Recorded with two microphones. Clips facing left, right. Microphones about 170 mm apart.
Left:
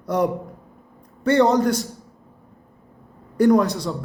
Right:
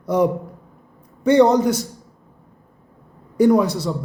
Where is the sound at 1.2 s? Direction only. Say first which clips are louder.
Right 3 dB; 15° right (ahead or behind).